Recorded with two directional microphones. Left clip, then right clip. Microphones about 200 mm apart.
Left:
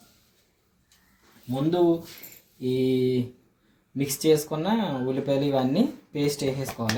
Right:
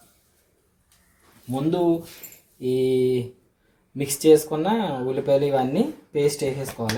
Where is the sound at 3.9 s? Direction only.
25° right (ahead or behind).